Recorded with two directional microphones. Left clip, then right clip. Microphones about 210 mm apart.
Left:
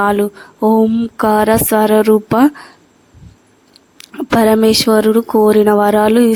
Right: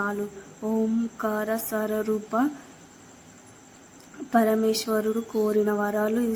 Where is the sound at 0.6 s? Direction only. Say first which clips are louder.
Left 15 dB; 40° left (ahead or behind).